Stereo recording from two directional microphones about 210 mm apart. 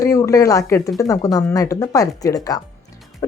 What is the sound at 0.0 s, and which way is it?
Speech, 15° left (ahead or behind).